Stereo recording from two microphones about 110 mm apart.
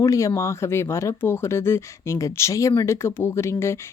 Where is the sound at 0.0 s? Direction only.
30° left (ahead or behind).